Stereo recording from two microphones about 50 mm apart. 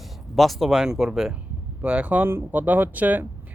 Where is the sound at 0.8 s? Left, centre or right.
Centre.